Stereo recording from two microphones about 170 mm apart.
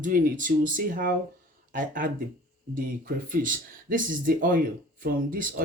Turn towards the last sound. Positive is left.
turn(degrees=-55)  # may be behind; listen again after turning